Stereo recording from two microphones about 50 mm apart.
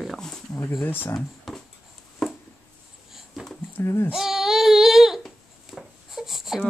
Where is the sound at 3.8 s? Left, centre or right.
Left.